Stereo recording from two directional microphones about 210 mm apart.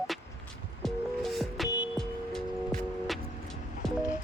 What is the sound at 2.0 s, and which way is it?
Music, centre (ahead or behind).